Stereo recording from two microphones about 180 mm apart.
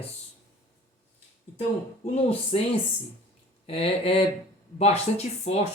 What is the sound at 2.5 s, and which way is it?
Speech, 35° left (ahead or behind).